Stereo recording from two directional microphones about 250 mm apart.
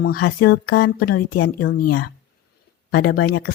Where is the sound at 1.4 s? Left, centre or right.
Left.